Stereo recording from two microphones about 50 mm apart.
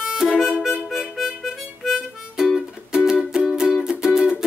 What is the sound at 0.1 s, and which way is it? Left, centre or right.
Harmonica, centre.